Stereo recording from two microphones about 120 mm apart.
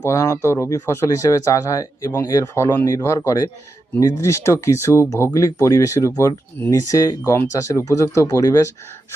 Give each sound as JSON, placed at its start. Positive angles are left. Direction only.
{"t": 0.0, "sound": "speech", "side_deg": 25}